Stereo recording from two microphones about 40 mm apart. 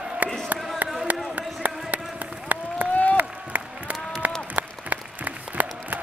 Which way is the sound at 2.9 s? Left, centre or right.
Left.